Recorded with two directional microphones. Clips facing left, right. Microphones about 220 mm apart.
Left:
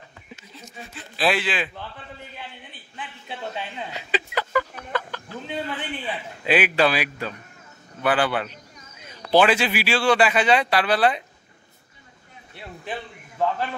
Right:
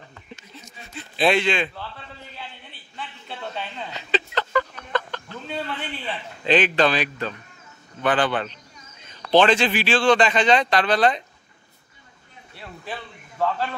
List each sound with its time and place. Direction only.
0.9 s a man's voice: centre (ahead or behind)
3.0 s a sound: 15° left (ahead or behind)
8.0 s a man's voice: 10° left (ahead or behind)
13.4 s a man's voice: 15° left (ahead or behind)